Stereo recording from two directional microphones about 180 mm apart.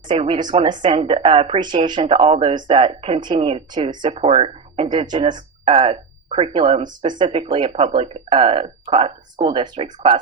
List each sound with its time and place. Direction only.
0.1 s a woman's voice: 30° right (ahead or behind)